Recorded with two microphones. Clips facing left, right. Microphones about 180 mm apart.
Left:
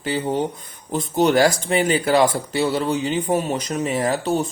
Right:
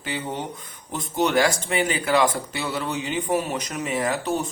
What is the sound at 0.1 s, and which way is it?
Speech, 30° left (ahead or behind).